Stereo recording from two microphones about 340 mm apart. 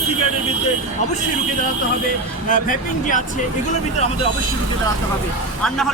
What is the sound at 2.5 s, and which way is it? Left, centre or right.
Speech, left.